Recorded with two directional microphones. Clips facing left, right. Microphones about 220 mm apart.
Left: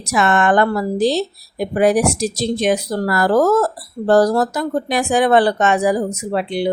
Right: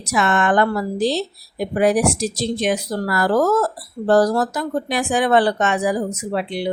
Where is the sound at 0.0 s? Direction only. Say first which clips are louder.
Left 3 dB; 45° left (ahead or behind).